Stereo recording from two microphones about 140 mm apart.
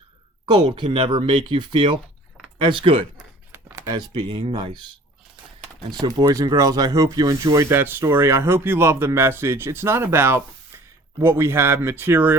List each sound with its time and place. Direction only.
0.4 s speech: 35° right (ahead or behind)
3.5 s a sound: 20° right (ahead or behind)
3.9 s speech: 35° right (ahead or behind)
5.9 s speech: 30° right (ahead or behind)